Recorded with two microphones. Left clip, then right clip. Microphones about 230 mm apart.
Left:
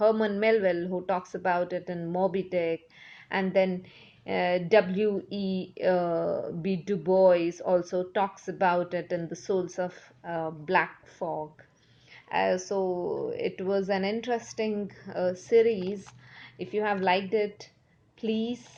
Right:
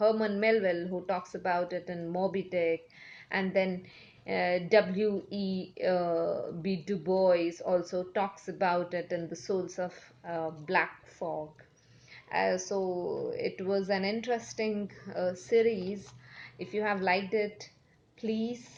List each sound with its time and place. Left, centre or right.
0.0 s a woman's voice: left